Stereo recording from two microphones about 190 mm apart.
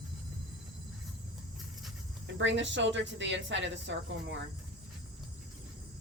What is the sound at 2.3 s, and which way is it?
A woman's voice, 75° right (ahead or behind).